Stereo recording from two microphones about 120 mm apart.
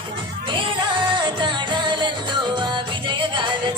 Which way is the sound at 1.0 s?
40° right (ahead or behind).